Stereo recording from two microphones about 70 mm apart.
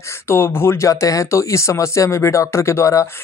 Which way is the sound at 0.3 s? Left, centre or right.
Left.